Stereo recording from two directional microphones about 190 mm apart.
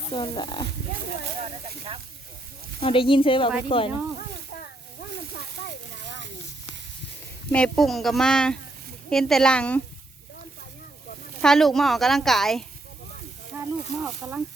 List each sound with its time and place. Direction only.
0.1 s speech: 25° left (ahead or behind)
2.8 s speech: 25° left (ahead or behind)
7.5 s a woman's voice: 5° left (ahead or behind)
11.4 s a woman's voice: centre (ahead or behind)
13.5 s speech: 10° right (ahead or behind)